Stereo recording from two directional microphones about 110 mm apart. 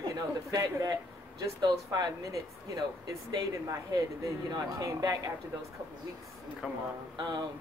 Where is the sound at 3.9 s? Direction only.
35° right (ahead or behind).